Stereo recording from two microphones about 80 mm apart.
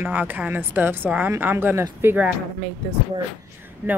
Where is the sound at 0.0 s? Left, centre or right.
Right.